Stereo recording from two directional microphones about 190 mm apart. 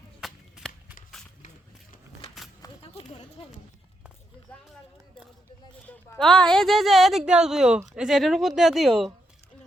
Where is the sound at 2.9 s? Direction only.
30° left (ahead or behind).